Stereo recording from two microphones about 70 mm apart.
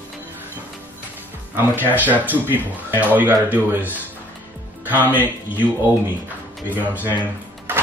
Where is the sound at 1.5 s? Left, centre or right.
Right.